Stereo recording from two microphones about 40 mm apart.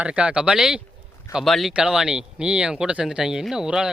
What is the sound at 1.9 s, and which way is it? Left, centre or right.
Speech, centre.